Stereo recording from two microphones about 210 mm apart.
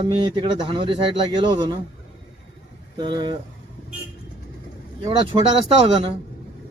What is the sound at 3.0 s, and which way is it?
Speech, 20° right (ahead or behind).